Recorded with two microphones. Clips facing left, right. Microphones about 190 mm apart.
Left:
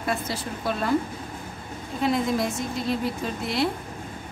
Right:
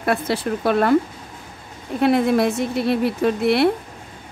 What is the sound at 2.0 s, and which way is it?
Speech, 65° right (ahead or behind).